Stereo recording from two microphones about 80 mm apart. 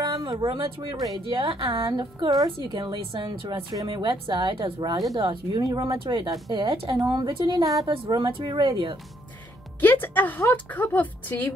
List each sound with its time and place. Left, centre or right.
0.0 s a woman's voice: right
3.7 s a woman's voice: right
5.6 s a woman's voice: right
5.9 s a woman's voice: right
7.0 s a woman's voice: right
8.2 s speech: right
9.8 s speech: left